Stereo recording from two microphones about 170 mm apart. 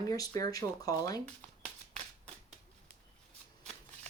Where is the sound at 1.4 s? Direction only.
40° right (ahead or behind).